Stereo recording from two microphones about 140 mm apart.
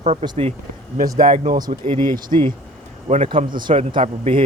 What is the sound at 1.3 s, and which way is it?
Speech, 30° right (ahead or behind).